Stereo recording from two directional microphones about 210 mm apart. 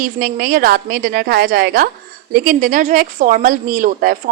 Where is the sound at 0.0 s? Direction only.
45° right (ahead or behind).